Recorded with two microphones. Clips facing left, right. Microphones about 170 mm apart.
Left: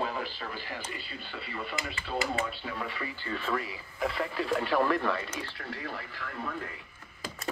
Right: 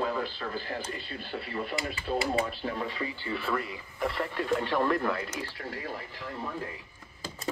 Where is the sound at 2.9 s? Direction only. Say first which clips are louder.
Right 2 dB; 20° right (ahead or behind).